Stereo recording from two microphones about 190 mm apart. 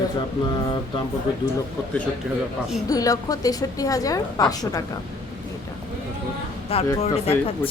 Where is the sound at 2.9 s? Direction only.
20° left (ahead or behind).